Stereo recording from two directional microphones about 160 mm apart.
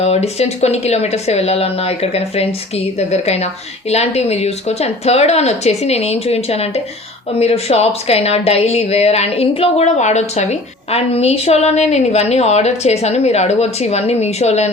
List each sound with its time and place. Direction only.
0.0 s a woman's voice: 40° left (ahead or behind)